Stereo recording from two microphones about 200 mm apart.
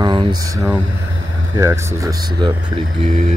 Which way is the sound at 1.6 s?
15° right (ahead or behind).